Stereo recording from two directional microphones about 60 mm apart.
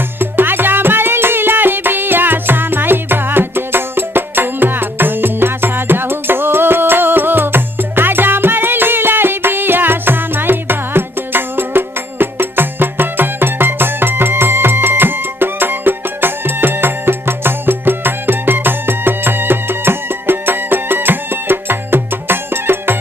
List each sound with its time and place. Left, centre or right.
0.2 s music: right